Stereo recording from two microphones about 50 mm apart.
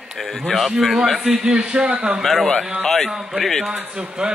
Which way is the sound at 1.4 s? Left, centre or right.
Centre.